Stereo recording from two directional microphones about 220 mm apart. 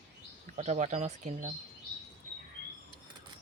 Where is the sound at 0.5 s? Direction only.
30° right (ahead or behind).